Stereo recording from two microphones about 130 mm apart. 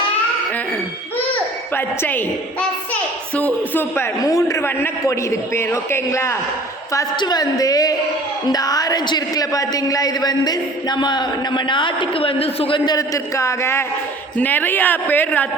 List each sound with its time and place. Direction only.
1.7 s a woman's voice: 15° left (ahead or behind)
6.9 s a man's voice: 30° left (ahead or behind); by 15.4 s 15° left (ahead or behind)